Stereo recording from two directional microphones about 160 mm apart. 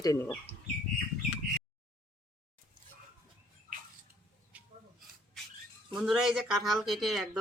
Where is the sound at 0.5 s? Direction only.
40° right (ahead or behind).